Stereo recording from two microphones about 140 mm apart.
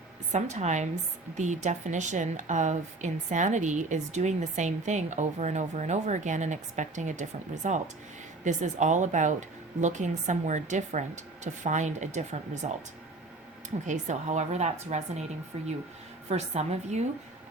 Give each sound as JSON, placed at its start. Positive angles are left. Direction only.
{"t": 0.3, "sound": "a woman's voice", "side_deg": -60}
{"t": 13.8, "sound": "a woman's voice", "side_deg": -60}